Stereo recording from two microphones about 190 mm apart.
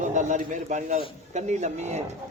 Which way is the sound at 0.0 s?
40° right (ahead or behind).